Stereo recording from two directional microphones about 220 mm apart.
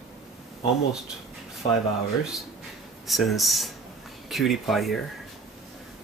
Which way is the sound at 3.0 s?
Centre (ahead or behind).